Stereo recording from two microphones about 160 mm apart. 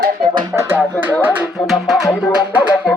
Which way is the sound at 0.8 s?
10° right (ahead or behind).